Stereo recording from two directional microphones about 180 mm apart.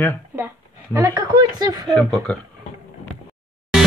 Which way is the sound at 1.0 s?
20° right (ahead or behind).